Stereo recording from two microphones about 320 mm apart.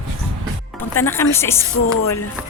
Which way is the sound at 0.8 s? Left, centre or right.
Centre.